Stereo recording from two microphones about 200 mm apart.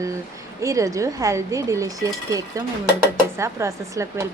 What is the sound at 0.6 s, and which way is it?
Speech, 15° right (ahead or behind).